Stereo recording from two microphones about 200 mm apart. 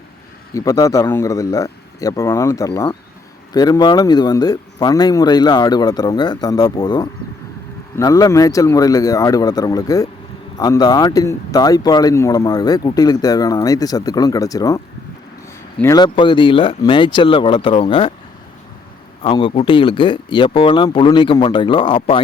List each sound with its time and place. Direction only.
0.5 s a man's voice: 15° left (ahead or behind)
15.8 s speech: 20° left (ahead or behind)
19.2 s speech: 25° left (ahead or behind)